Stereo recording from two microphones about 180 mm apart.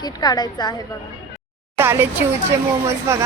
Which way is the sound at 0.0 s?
20° left (ahead or behind).